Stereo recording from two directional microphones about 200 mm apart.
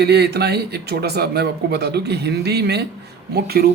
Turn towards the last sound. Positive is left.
turn(degrees=-50)  # may be behind; listen again after turning